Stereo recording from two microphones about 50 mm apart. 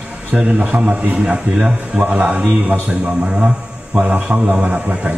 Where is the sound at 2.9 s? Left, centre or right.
Centre.